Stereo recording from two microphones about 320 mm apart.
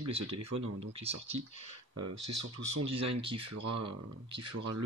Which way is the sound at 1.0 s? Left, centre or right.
Centre.